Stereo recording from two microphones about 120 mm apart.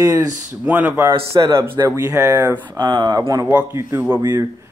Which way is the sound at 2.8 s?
35° right (ahead or behind).